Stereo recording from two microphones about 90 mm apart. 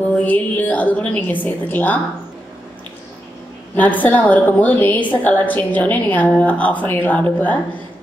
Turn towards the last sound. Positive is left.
turn(degrees=15)  # may be behind; listen again after turning